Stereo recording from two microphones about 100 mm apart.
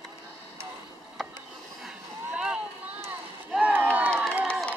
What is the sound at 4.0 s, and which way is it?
Crowd, 20° right (ahead or behind).